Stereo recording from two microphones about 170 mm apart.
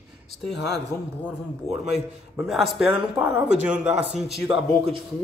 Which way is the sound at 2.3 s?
Centre (ahead or behind).